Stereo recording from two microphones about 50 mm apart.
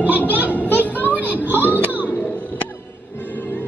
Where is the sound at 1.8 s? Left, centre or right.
Right.